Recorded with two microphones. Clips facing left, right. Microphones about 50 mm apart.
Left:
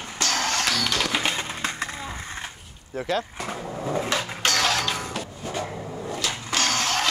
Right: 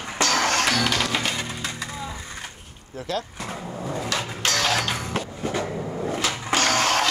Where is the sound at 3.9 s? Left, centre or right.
Left.